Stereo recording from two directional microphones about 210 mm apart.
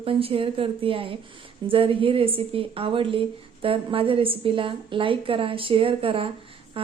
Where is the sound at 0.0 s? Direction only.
25° right (ahead or behind).